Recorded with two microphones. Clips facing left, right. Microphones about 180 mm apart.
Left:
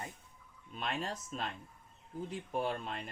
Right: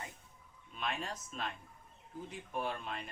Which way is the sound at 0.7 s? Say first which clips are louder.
Left 2 dB; 35° left (ahead or behind).